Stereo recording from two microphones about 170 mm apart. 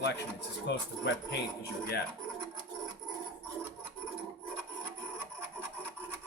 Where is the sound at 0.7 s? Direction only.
90° left.